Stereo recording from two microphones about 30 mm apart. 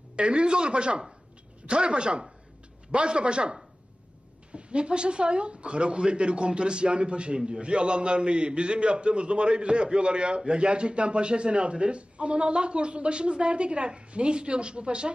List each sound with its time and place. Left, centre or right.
0.1 s a man's voice: right